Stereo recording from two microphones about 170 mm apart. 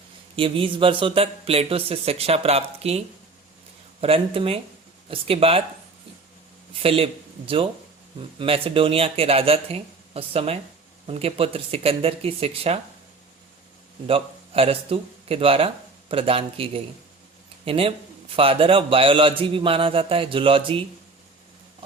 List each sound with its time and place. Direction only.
0.3 s speech: 30° right (ahead or behind)
4.0 s speech: 35° right (ahead or behind)
6.7 s speech: 35° right (ahead or behind)
14.1 s speech: 35° right (ahead or behind)